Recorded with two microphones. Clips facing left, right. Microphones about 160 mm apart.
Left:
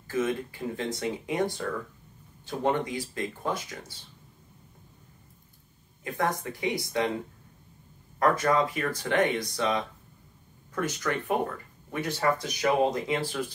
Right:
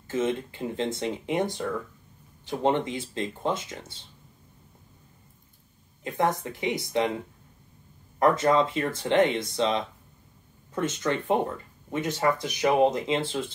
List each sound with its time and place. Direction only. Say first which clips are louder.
0.1 s speech: right 1 dB; 25° right (ahead or behind)
6.0 s speech: right 3 dB; 20° right (ahead or behind)
8.2 s speech: right 3 dB; 25° right (ahead or behind)